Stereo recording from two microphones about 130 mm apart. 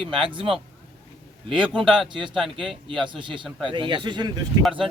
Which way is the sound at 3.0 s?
40° right (ahead or behind).